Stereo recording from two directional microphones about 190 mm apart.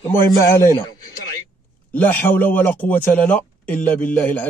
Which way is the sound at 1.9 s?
10° left (ahead or behind).